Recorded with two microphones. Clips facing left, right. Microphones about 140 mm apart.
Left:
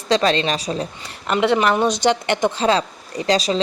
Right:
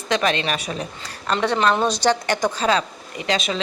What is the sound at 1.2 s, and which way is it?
A woman's voice, 15° left (ahead or behind).